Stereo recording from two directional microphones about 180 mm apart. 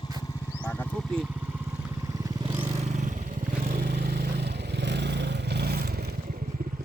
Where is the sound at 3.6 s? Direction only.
60° right (ahead or behind).